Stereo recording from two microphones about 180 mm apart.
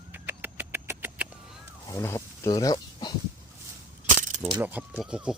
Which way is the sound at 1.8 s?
15° left (ahead or behind).